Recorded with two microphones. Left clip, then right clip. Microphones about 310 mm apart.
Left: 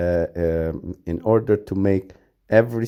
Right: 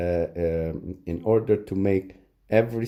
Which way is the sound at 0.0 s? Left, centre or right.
Left.